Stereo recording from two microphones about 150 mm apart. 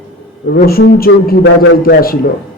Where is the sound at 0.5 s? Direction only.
85° left.